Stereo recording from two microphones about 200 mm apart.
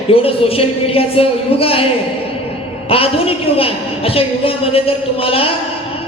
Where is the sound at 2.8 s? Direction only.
30° left (ahead or behind).